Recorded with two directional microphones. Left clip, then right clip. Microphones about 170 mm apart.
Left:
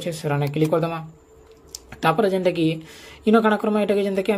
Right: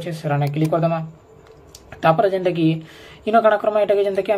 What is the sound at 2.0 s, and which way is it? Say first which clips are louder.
Speech: right 3 dB; 40° left (ahead or behind).